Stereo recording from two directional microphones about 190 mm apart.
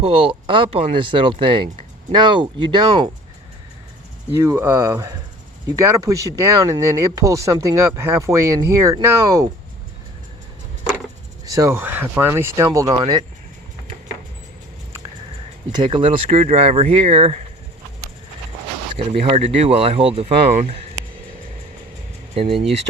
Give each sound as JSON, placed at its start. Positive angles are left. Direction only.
{"t": 0.0, "sound": "speech", "side_deg": -30}
{"t": 4.4, "sound": "speech", "side_deg": -15}
{"t": 11.4, "sound": "speech", "side_deg": -15}
{"t": 15.7, "sound": "speech", "side_deg": -25}
{"t": 18.9, "sound": "speech", "side_deg": -30}
{"t": 22.4, "sound": "speech", "side_deg": -30}